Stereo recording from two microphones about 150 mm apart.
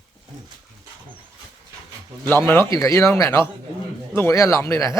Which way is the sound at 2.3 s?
15° left (ahead or behind).